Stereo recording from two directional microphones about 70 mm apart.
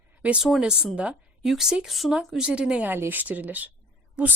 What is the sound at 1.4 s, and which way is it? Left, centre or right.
Speech, centre.